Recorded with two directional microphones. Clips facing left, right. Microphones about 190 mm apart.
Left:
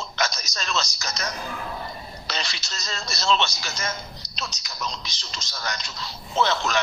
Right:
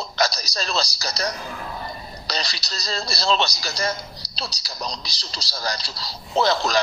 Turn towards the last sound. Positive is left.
turn(degrees=-35)  # may be behind; listen again after turning